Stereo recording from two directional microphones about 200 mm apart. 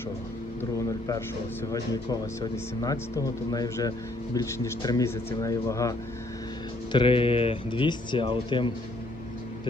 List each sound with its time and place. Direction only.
0.6 s a sound: 15° left (ahead or behind)
1.7 s speech: 20° left (ahead or behind)
6.9 s speech: 25° left (ahead or behind)